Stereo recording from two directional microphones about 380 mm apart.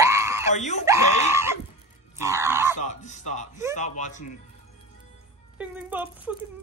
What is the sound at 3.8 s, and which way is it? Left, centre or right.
Speech, centre.